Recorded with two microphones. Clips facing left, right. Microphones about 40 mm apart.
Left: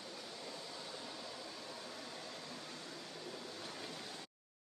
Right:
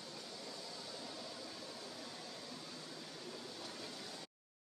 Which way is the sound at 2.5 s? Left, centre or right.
Left.